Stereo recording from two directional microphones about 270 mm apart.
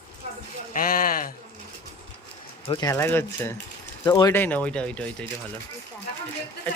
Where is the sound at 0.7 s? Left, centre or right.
Left.